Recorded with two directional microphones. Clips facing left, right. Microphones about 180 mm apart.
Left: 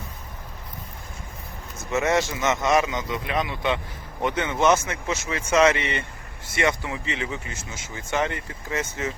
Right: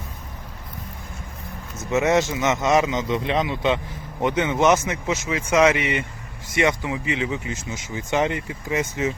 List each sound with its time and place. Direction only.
1.9 s speech: 15° right (ahead or behind)